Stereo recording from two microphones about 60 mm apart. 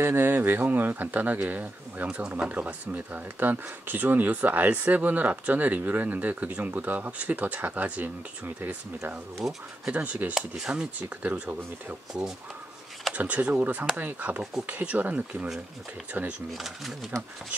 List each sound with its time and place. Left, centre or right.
0.0 s speech: right
2.0 s speech: centre
10.3 s speech: centre
12.1 s speech: centre
13.1 s speech: right
16.5 s speech: centre